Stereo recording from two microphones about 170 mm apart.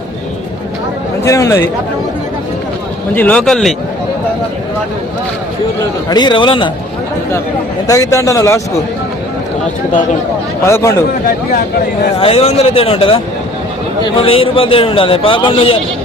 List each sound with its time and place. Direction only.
1.2 s speech: 15° left (ahead or behind)
3.2 s a man's voice: 5° left (ahead or behind)
6.1 s speech: 25° left (ahead or behind)
7.9 s speech: 20° left (ahead or behind)
10.7 s speech: 15° left (ahead or behind)
12.2 s a man's voice: 35° left (ahead or behind)